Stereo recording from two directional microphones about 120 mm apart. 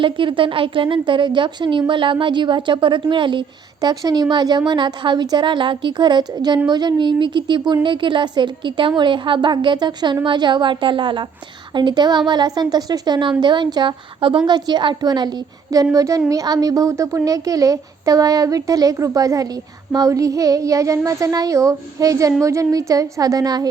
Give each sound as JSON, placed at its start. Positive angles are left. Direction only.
{"t": 0.0, "sound": "a woman's voice", "side_deg": -45}